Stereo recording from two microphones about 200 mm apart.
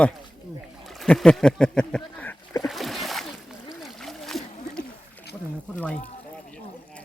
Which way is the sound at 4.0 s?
Centre (ahead or behind).